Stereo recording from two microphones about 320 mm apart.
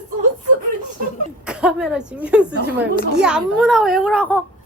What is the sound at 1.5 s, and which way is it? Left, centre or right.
A woman's voice, centre.